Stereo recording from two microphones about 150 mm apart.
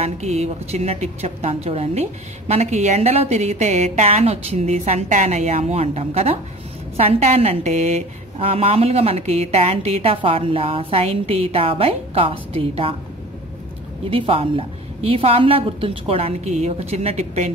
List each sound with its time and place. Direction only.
0.0 s a woman's voice: 45° right (ahead or behind)
14.1 s a woman's voice: 40° right (ahead or behind)